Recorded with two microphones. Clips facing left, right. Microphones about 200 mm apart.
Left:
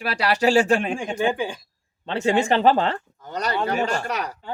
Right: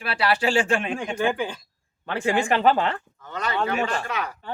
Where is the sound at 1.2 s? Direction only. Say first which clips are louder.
Left 1 dB; 15° left (ahead or behind); by 4.3 s 40° left (ahead or behind).